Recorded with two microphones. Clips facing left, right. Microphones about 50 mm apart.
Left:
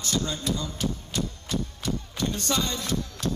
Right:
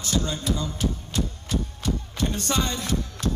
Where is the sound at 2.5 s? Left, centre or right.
Centre.